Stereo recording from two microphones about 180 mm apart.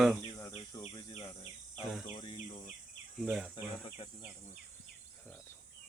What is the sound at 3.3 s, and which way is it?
Speech, 5° right (ahead or behind).